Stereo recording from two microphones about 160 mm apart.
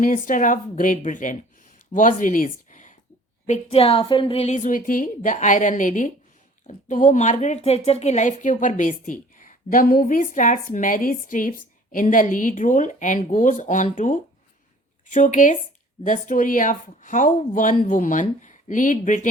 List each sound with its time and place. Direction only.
0.0 s a woman's voice: 55° left (ahead or behind)